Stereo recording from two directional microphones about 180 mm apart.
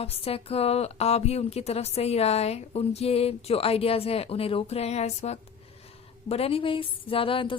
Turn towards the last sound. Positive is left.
turn(degrees=30)  # may be behind; listen again after turning